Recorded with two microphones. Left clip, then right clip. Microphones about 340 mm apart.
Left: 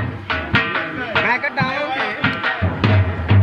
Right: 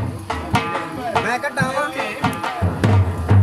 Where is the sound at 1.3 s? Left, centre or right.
Right.